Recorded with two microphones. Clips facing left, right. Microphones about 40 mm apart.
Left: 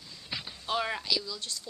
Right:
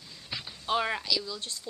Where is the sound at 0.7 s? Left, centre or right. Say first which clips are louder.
Right 3 dB; centre.